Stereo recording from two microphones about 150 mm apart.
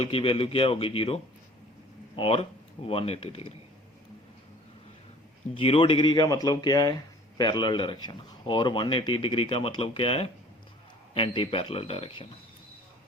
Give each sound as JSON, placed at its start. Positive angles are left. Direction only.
{"t": 0.0, "sound": "a man's voice", "side_deg": 40}
{"t": 5.5, "sound": "a man's voice", "side_deg": 35}